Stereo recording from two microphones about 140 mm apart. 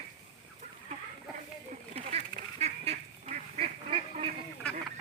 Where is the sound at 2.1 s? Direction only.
50° right (ahead or behind).